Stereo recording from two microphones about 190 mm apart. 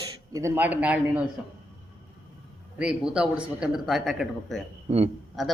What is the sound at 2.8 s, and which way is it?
Speech, 5° right (ahead or behind).